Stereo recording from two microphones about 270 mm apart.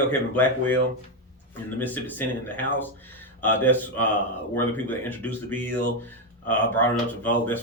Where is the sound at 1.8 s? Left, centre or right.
Centre.